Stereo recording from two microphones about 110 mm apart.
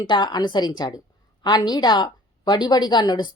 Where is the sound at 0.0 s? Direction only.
45° left (ahead or behind).